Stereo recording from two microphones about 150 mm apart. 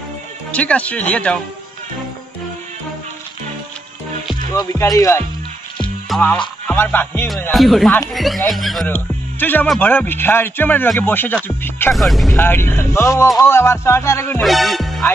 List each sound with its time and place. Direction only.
0.5 s speech: 10° left (ahead or behind)
4.7 s speech: 20° left (ahead or behind)
6.1 s music: centre (ahead or behind)
6.7 s speech: 15° left (ahead or behind)
7.5 s speech: centre (ahead or behind)
8.8 s speech: 10° left (ahead or behind)
11.9 s speech: centre (ahead or behind)
12.4 s speech: 15° left (ahead or behind)
14.4 s music: centre (ahead or behind)